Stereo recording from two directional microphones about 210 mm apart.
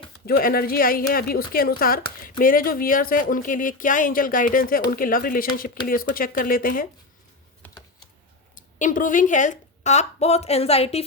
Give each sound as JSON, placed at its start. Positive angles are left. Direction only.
{"t": 0.3, "sound": "speech", "side_deg": 45}
{"t": 8.5, "sound": "a woman's voice", "side_deg": 40}